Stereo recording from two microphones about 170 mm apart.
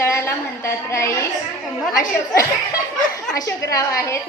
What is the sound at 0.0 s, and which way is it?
A woman's voice, 15° left (ahead or behind).